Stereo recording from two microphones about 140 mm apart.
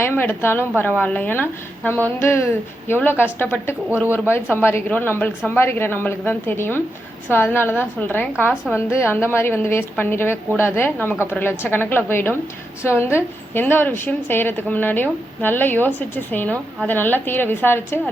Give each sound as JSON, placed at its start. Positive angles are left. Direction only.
{"t": 0.0, "sound": "a woman's voice", "side_deg": 15}